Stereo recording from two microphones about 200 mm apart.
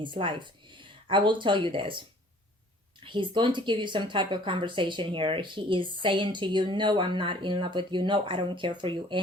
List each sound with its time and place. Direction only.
0.0 s speech: 25° right (ahead or behind)